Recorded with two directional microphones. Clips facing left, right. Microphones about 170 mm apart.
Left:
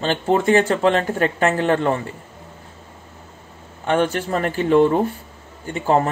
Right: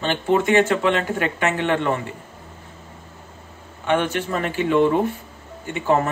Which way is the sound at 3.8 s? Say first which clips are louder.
Left 2 dB; 35° left (ahead or behind).